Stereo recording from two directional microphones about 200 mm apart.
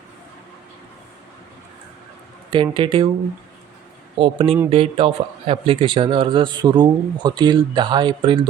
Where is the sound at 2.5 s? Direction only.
25° right (ahead or behind).